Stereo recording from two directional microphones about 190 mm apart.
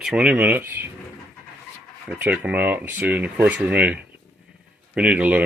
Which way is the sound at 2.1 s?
10° right (ahead or behind).